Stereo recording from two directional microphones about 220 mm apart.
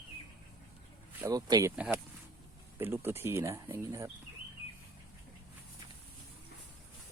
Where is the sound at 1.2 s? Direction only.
15° right (ahead or behind).